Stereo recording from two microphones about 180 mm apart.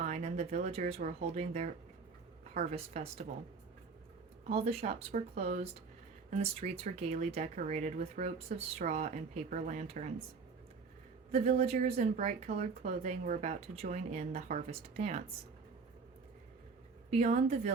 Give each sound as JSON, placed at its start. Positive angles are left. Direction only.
{"t": 0.0, "sound": "a woman's voice", "side_deg": -40}
{"t": 4.4, "sound": "speech", "side_deg": -35}
{"t": 6.3, "sound": "speech", "side_deg": -35}
{"t": 11.3, "sound": "speech", "side_deg": -35}
{"t": 17.1, "sound": "speech", "side_deg": -40}